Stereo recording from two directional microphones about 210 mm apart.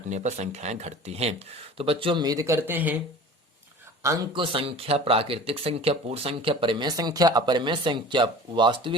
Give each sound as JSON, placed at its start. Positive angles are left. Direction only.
{"t": 0.1, "sound": "speech", "side_deg": -35}
{"t": 4.0, "sound": "speech", "side_deg": -15}